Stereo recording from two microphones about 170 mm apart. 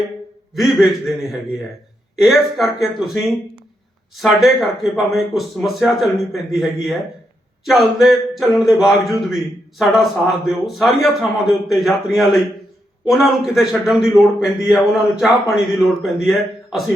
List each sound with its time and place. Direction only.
0.5 s a man's voice: centre (ahead or behind)
4.2 s a man's voice: centre (ahead or behind)